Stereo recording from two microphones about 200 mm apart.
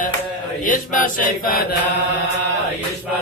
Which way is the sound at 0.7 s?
40° left (ahead or behind).